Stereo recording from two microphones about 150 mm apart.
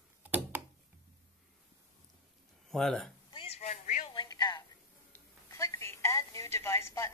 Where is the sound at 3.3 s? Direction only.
40° left (ahead or behind).